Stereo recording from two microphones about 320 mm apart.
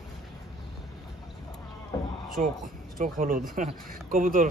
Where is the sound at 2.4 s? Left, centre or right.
Right.